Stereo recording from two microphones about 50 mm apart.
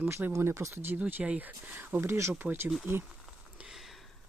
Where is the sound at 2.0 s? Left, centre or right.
Right.